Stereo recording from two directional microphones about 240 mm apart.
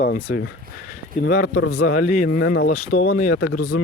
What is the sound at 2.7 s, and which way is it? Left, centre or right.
Speech, left.